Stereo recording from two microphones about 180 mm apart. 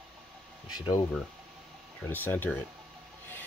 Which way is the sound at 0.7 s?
20° left (ahead or behind).